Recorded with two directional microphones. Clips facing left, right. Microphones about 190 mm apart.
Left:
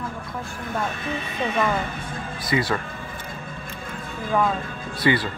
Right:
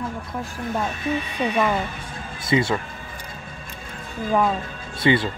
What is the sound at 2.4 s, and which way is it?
Speech, 25° right (ahead or behind).